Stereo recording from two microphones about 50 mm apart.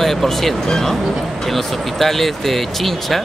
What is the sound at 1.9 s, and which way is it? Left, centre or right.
Speech, centre.